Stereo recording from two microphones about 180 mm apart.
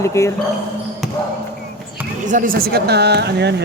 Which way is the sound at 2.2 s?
50° right (ahead or behind).